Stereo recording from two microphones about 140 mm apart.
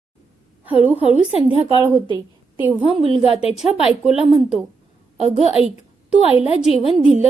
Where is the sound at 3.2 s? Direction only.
45° left (ahead or behind).